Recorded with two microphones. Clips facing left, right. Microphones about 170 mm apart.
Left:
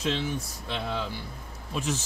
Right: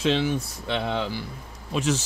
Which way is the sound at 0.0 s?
80° right.